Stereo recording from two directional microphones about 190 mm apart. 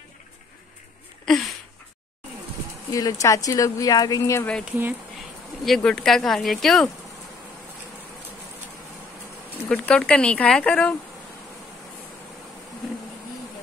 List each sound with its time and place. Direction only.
2.9 s speech: 20° left (ahead or behind)
4.6 s speech: 10° right (ahead or behind)
5.7 s speech: 5° left (ahead or behind)
9.7 s speech: 5° left (ahead or behind)